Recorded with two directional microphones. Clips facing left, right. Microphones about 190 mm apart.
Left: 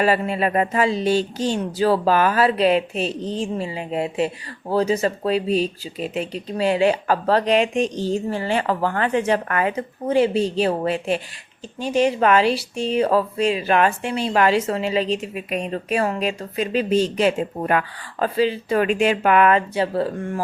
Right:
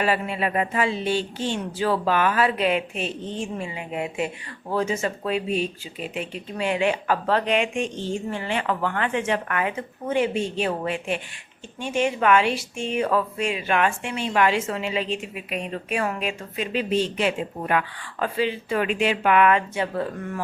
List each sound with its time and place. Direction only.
0.0 s speech: 40° left (ahead or behind)